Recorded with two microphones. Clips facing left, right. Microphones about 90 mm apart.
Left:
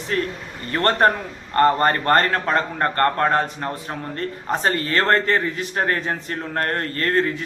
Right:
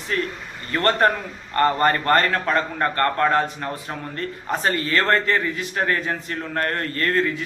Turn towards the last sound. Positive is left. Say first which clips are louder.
# left 1 dB
turn(degrees=35)  # may be behind; listen again after turning